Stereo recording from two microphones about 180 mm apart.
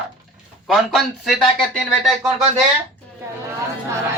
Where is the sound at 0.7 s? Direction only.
Centre (ahead or behind).